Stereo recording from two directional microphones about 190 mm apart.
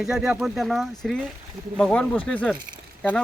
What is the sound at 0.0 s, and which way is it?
Speech, 5° right (ahead or behind).